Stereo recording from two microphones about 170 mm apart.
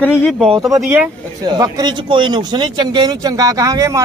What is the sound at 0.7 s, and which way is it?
Speech, 10° right (ahead or behind).